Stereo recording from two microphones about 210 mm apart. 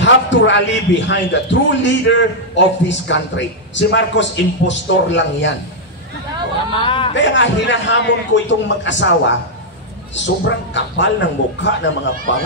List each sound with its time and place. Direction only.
0.0 s a man's voice: 60° left (ahead or behind)
6.7 s speech: 25° left (ahead or behind)
7.2 s a man's voice: 60° left (ahead or behind)